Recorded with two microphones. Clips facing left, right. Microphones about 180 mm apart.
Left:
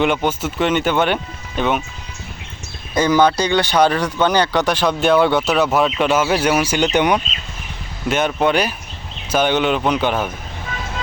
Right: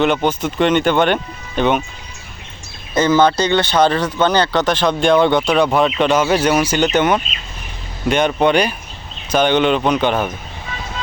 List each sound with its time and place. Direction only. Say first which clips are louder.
0.0 s speech: right 2 dB; 10° left (ahead or behind)
2.9 s speech: right 1 dB; 10° left (ahead or behind)
8.0 s speech: right 3 dB; centre (ahead or behind)